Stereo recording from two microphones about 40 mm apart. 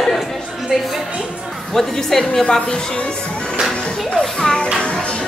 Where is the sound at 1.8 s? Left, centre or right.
Centre.